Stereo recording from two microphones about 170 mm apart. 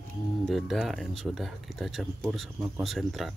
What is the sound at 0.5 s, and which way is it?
Speech, centre (ahead or behind).